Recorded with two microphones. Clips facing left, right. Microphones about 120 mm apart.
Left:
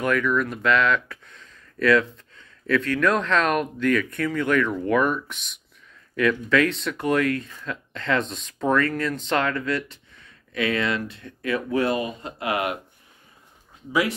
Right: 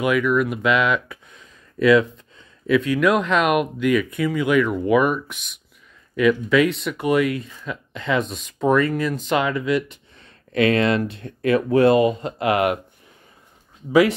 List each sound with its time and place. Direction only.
0.0 s speech: 10° right (ahead or behind)
10.5 s speech: 60° right (ahead or behind)